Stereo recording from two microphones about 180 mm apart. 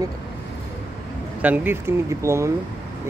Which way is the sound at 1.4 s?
10° right (ahead or behind).